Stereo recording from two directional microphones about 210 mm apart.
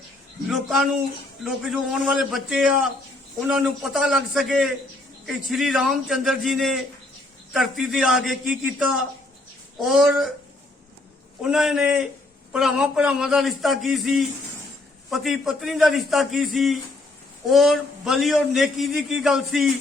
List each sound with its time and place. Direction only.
0.5 s a man's voice: centre (ahead or behind)
11.5 s a man's voice: 5° right (ahead or behind)